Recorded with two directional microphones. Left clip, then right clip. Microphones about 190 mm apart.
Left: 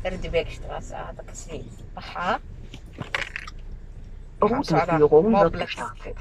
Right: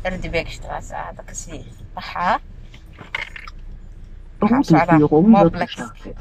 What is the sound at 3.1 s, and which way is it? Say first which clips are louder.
Biting: right 1 dB; 60° left (ahead or behind).